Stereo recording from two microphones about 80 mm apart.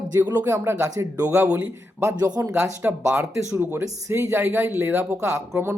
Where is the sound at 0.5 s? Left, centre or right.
Right.